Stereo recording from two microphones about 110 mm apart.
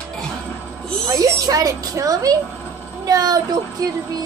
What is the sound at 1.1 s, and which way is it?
A woman's voice, 35° right (ahead or behind).